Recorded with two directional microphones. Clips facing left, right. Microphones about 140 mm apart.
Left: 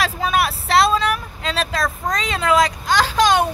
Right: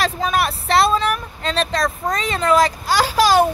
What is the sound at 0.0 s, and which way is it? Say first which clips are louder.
Speech: even; centre (ahead or behind).